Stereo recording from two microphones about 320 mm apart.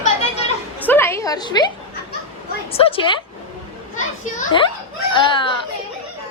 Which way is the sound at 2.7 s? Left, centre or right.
Centre.